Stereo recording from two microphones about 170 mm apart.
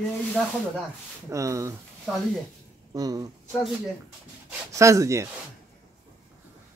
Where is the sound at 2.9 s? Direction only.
20° right (ahead or behind).